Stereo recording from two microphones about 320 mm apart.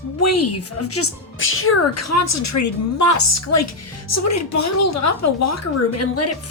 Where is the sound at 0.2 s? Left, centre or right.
Left.